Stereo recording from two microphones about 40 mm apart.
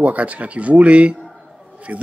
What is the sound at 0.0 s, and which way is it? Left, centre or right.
Speech, right.